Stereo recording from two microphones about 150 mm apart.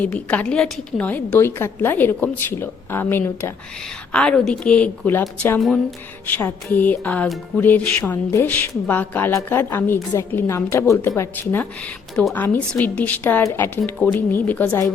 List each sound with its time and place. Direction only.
0.0 s music: 10° left (ahead or behind)
5.5 s speech: centre (ahead or behind)
6.2 s music: 10° left (ahead or behind)